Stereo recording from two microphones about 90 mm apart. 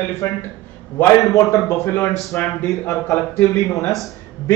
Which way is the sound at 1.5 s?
30° left (ahead or behind).